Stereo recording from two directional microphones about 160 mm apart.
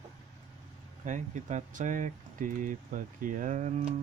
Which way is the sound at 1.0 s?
50° right (ahead or behind).